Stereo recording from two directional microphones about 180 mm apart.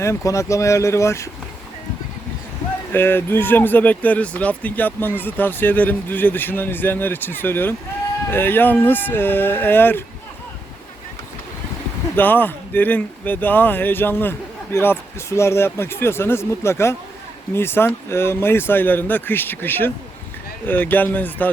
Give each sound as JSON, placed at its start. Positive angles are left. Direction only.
{"t": 0.0, "sound": "speech", "side_deg": 15}
{"t": 2.9, "sound": "speech", "side_deg": 10}
{"t": 12.1, "sound": "speech", "side_deg": 10}